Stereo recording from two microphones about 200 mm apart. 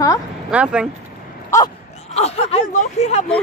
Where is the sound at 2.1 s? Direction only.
30° left (ahead or behind).